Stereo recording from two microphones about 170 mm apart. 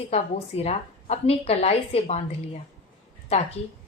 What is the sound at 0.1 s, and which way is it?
A woman's voice, 35° left (ahead or behind).